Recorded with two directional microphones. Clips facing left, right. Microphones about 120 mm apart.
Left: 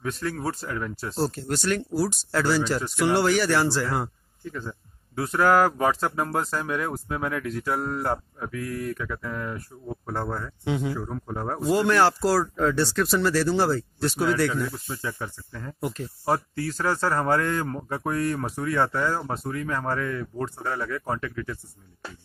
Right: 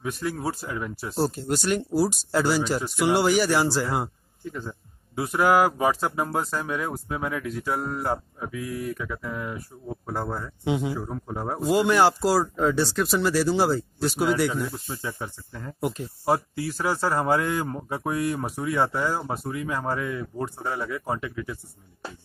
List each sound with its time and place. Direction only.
0.0 s speech: 15° right (ahead or behind)
14.5 s speech: 25° right (ahead or behind)